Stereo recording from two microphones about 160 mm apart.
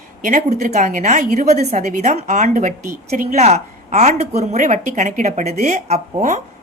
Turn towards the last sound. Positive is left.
turn(degrees=-45)  # may be behind; listen again after turning